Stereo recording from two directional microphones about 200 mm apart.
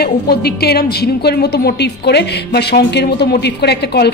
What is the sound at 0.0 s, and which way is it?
A woman's voice, 50° left (ahead or behind).